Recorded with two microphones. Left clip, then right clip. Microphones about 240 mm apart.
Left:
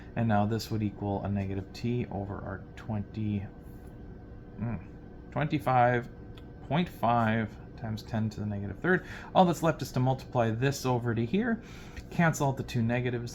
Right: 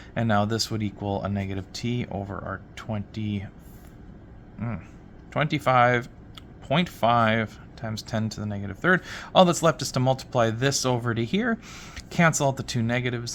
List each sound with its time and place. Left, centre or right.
0.1 s speech: right
4.6 s speech: right